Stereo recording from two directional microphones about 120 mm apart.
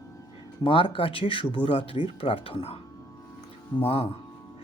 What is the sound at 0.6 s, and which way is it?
Speech, 45° left (ahead or behind).